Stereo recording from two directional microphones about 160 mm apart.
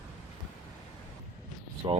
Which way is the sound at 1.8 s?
30° right (ahead or behind).